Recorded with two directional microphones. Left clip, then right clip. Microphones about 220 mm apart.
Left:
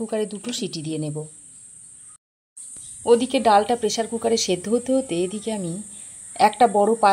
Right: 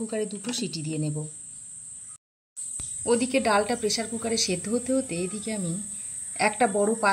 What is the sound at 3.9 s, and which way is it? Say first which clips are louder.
Speech: left 7 dB; 30° left (ahead or behind).